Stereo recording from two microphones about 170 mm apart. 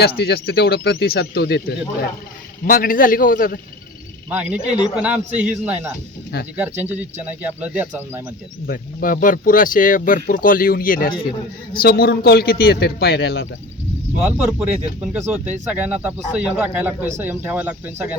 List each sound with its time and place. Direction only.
0.0 s a man's voice: 70° left (ahead or behind)
2.6 s speech: 55° left (ahead or behind)
4.3 s speech: 5° right (ahead or behind)
8.6 s a man's voice: 55° left (ahead or behind); by 13.5 s 80° left
14.2 s speech: 10° right (ahead or behind)